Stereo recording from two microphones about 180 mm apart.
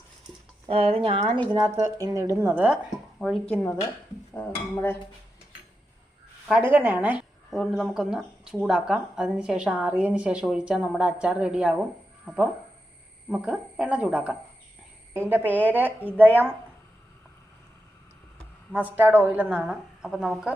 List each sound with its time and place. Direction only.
0.7 s speech: 35° right (ahead or behind)
2.0 s a woman's voice: 20° right (ahead or behind)
3.2 s speech: centre (ahead or behind)
3.5 s cutlery: 10° left (ahead or behind)
6.5 s a woman's voice: 10° right (ahead or behind)
18.7 s a woman's voice: 10° right (ahead or behind)